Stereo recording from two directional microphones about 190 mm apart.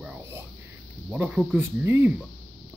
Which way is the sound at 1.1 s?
5° right (ahead or behind).